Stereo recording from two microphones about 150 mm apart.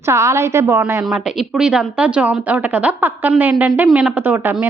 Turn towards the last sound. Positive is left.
turn(degrees=-10)  # may be behind; listen again after turning